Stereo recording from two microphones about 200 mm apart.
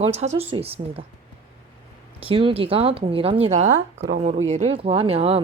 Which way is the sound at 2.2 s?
25° right (ahead or behind).